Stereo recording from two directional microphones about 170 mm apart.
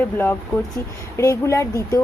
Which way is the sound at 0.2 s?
10° left (ahead or behind).